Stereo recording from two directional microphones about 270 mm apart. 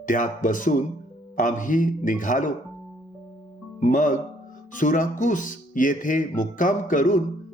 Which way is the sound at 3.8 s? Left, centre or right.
Left.